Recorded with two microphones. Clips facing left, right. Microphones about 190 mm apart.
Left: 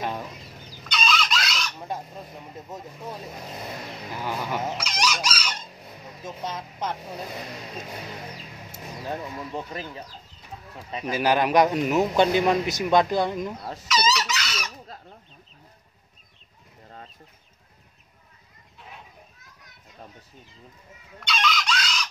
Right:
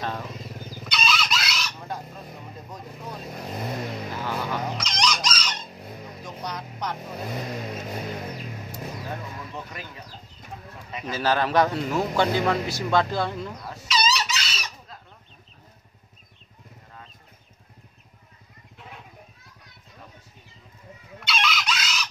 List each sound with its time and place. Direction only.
0.8 s chicken: centre (ahead or behind)
4.2 s chicken: 15° left (ahead or behind)
6.2 s speech: 25° left (ahead or behind)
9.1 s speech: 30° left (ahead or behind)
11.1 s a man's voice: 15° left (ahead or behind)
13.8 s chicken: 30° right (ahead or behind)
21.2 s chicken: 5° right (ahead or behind)